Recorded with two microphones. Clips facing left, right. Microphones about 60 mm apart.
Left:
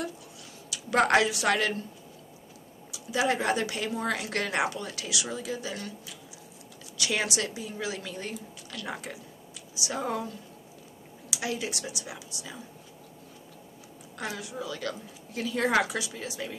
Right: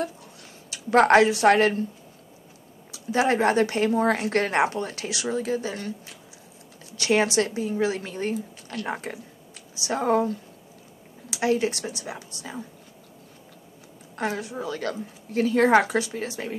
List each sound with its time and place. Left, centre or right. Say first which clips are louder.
0.7 s speech: right 6 dB; right
2.9 s a woman's voice: right 5 dB; right
14.1 s speech: right 7 dB; right